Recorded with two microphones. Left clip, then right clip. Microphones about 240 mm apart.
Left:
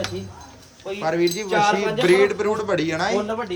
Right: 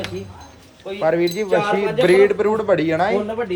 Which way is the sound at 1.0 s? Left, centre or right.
Centre.